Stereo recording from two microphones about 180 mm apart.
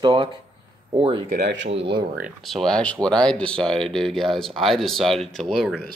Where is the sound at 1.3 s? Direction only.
70° right (ahead or behind).